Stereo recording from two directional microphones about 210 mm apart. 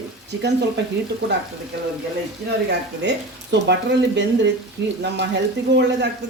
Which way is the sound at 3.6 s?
55° right (ahead or behind).